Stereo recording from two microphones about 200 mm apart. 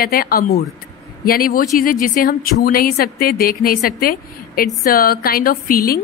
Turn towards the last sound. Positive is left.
turn(degrees=45)  # may be behind; listen again after turning